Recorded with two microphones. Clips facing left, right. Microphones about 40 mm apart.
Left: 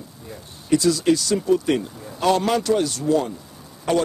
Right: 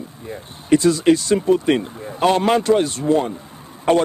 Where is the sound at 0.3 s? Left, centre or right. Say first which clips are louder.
Right 4 dB; right.